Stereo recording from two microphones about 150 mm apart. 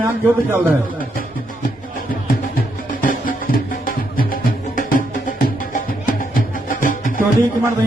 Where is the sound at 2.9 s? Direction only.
65° left (ahead or behind).